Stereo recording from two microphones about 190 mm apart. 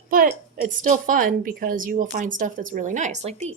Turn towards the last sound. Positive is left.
turn(degrees=-35)  # may be behind; listen again after turning